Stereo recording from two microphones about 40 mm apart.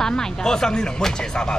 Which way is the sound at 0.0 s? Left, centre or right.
Centre.